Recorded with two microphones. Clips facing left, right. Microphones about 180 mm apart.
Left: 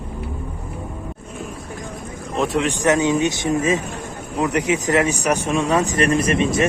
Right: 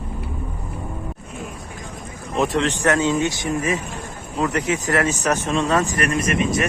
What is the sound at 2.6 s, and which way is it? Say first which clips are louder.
Speech: left 1 dB; 15° left (ahead or behind).